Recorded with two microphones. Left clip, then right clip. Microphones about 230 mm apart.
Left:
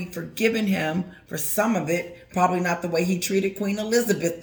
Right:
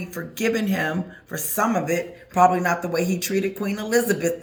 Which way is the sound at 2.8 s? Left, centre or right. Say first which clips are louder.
Even; right.